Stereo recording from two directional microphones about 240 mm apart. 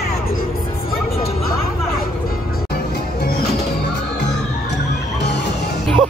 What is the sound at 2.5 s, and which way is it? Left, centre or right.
Music, left.